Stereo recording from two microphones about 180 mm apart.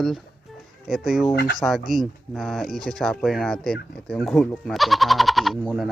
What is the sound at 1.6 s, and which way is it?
Speech, centre (ahead or behind).